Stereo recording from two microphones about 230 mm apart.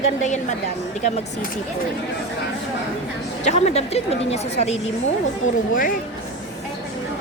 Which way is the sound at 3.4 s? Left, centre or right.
Left.